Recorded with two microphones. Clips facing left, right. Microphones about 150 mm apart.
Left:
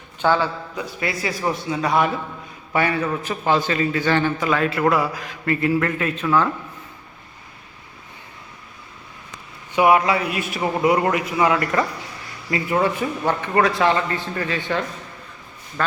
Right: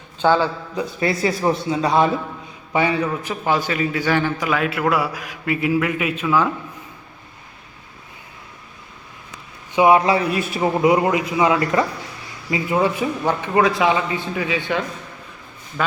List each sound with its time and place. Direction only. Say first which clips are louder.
0.2 s a man's voice: right 2 dB; 20° right (ahead or behind)
2.7 s a man's voice: right 1 dB; 15° right (ahead or behind)
9.7 s a man's voice: right 2 dB; 25° right (ahead or behind)
10.8 s a man's voice: right 2 dB; 20° right (ahead or behind)